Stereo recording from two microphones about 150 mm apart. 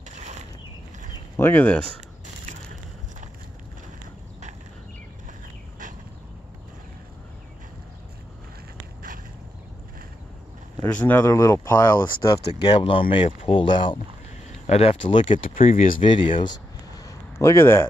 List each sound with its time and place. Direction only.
0.1 s a sound: 50° right (ahead or behind)
1.3 s speech: 15° left (ahead or behind)
10.8 s speech: 10° left (ahead or behind)
11.2 s speech: 25° left (ahead or behind)
12.5 s speech: 35° left (ahead or behind)
15.5 s speech: 60° left (ahead or behind)
16.0 s a sound: 35° left (ahead or behind); by 17.8 s 15° left (ahead or behind)